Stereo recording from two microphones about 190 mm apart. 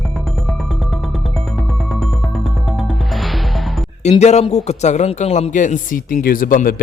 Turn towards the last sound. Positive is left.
turn(degrees=45)  # may be behind; listen again after turning